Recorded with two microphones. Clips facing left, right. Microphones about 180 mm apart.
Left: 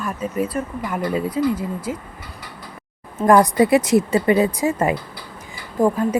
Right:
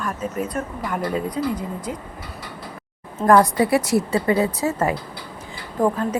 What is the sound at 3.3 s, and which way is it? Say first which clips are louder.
Speech: left 2 dB; 15° left (ahead or behind).